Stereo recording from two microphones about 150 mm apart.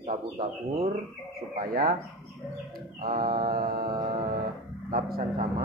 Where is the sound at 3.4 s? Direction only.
75° right (ahead or behind).